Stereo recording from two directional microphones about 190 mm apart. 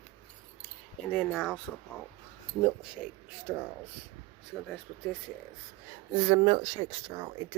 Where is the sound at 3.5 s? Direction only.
10° right (ahead or behind).